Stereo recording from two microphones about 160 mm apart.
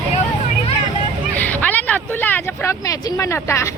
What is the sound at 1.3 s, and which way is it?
Speech, 10° left (ahead or behind).